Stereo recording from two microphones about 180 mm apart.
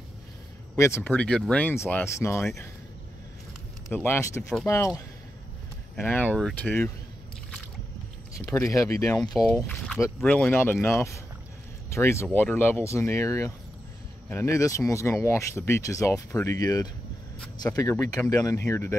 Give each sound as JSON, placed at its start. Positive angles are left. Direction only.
{"t": 0.7, "sound": "speech", "side_deg": 15}
{"t": 3.9, "sound": "speech", "side_deg": 10}
{"t": 8.4, "sound": "speech", "side_deg": 10}
{"t": 9.1, "sound": "speech", "side_deg": 5}